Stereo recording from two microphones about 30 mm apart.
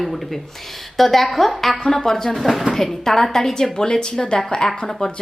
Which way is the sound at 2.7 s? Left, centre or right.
Centre.